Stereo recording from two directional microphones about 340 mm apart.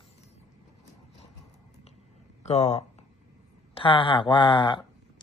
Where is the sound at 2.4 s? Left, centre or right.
Centre.